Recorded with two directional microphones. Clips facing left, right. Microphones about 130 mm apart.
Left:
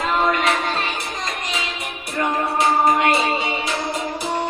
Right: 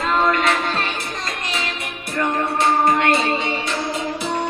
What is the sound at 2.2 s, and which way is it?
Music, centre (ahead or behind).